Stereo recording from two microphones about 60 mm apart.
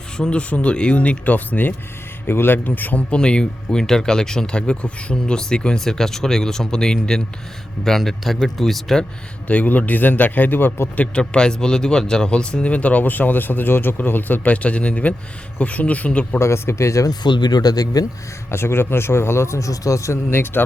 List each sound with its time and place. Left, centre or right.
0.2 s a man's voice: centre
3.1 s speech: centre
9.5 s speech: left
10.9 s speech: left
16.4 s speech: left
17.6 s speech: left
18.5 s speech: left
20.3 s a man's voice: left